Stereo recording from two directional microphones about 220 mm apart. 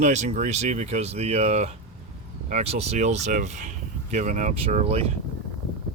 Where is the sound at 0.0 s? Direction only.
30° right (ahead or behind).